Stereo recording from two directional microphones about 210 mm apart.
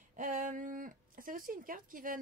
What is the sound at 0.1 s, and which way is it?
Speech, 40° right (ahead or behind).